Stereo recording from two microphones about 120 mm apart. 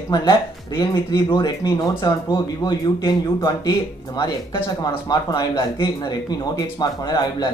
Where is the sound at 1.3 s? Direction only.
35° left (ahead or behind).